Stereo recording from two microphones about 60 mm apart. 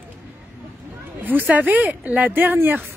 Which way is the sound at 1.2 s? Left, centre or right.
Right.